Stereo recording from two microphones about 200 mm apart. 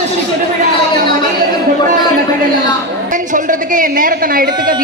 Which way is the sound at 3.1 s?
40° right (ahead or behind).